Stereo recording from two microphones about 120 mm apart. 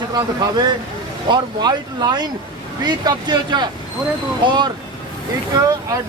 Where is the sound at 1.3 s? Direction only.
35° right (ahead or behind).